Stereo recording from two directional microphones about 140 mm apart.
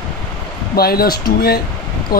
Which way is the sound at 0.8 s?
90° left.